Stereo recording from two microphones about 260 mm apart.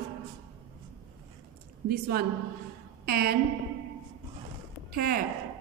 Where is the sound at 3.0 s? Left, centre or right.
Right.